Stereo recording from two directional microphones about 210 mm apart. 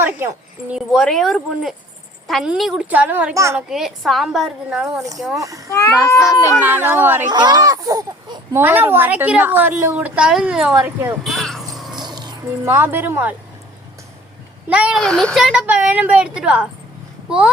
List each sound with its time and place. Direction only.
0.0 s a sound: 10° right (ahead or behind)
0.9 s a woman's voice: centre (ahead or behind)
3.7 s a woman's voice: centre (ahead or behind)
5.4 s speech: 15° right (ahead or behind)
6.1 s speech: 15° left (ahead or behind)
6.7 s speech: 10° right (ahead or behind)
11.9 s speech: 20° right (ahead or behind)
14.7 s a woman's voice: 5° right (ahead or behind)